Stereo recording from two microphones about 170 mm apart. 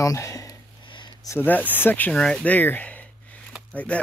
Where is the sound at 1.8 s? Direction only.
10° left (ahead or behind).